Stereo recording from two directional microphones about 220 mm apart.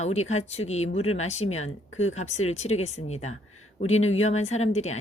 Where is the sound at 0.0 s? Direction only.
30° left (ahead or behind).